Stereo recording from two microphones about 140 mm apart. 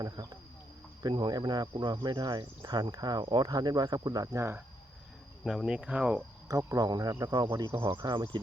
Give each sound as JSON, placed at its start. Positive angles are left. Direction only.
{"t": 0.0, "sound": "speech", "side_deg": -30}
{"t": 5.4, "sound": "speech", "side_deg": -5}
{"t": 6.5, "sound": "speech", "side_deg": -25}